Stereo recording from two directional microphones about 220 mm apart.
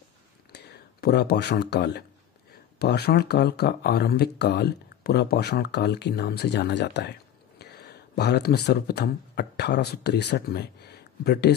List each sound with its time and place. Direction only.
0.5 s speech: 45° left (ahead or behind)